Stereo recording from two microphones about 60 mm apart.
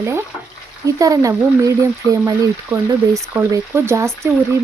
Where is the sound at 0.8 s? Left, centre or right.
Right.